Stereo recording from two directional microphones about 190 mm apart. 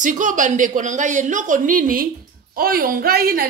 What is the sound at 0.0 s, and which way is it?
A woman's voice, 40° right (ahead or behind).